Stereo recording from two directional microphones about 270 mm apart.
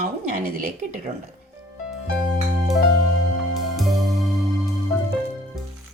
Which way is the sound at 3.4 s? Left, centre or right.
Centre.